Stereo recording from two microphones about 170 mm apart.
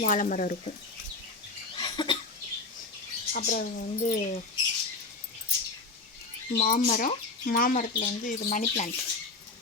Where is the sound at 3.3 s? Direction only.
55° left (ahead or behind).